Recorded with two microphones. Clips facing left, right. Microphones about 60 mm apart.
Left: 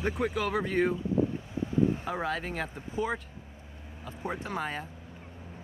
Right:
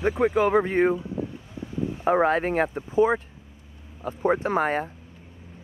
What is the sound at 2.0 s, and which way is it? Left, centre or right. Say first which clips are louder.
Speech: right 11 dB; right.